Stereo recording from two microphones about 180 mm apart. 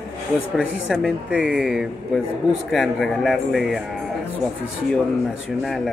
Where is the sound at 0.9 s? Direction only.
Centre (ahead or behind).